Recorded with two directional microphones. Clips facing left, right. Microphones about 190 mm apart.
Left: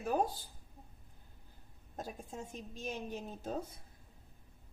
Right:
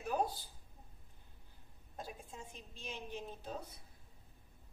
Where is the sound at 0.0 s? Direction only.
50° left (ahead or behind).